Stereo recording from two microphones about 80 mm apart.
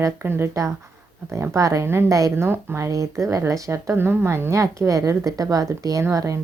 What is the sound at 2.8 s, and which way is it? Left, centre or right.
Speech, right.